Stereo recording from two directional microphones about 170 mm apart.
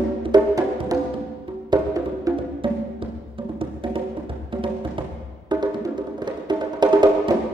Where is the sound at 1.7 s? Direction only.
25° right (ahead or behind).